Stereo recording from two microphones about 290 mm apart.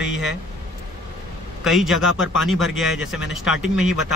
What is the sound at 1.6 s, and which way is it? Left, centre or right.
A man's voice, centre.